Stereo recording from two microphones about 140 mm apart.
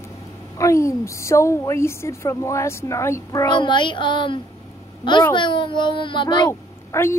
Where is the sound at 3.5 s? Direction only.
35° left (ahead or behind).